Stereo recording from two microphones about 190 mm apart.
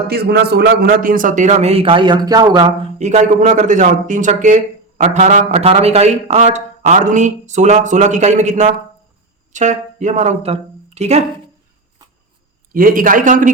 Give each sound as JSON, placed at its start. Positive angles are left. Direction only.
{"t": 0.1, "sound": "a man's voice", "side_deg": -60}
{"t": 3.0, "sound": "a man's voice", "side_deg": -40}
{"t": 12.7, "sound": "a man's voice", "side_deg": -45}